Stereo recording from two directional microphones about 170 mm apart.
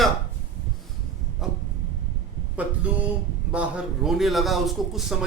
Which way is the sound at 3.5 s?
5° right (ahead or behind).